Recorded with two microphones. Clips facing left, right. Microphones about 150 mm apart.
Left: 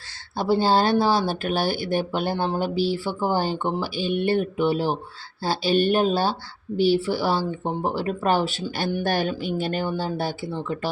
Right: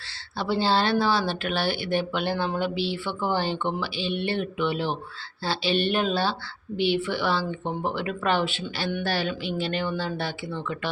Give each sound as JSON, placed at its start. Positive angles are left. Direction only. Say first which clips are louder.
{"t": 0.3, "sound": "speech", "louder": "left 4 dB", "side_deg": 45}